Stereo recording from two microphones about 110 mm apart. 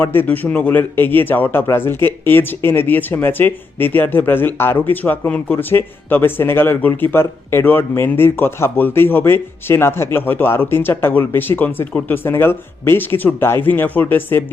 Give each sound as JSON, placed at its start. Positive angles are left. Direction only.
{"t": 0.0, "sound": "speech", "side_deg": 20}